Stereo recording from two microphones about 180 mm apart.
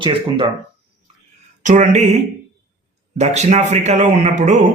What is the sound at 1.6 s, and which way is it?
Speech, 40° right (ahead or behind).